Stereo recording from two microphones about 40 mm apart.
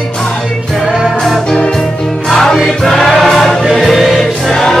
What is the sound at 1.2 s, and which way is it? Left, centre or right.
Music, centre.